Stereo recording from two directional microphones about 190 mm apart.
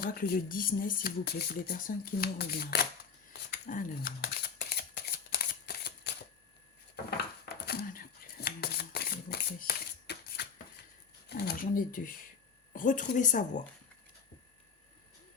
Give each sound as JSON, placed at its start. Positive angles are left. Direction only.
{"t": 0.0, "sound": "speech", "side_deg": 50}
{"t": 3.3, "sound": "a sound", "side_deg": 50}
{"t": 4.2, "sound": "shuffling cards", "side_deg": 60}
{"t": 7.4, "sound": "shuffling cards", "side_deg": 55}
{"t": 11.3, "sound": "speech", "side_deg": 55}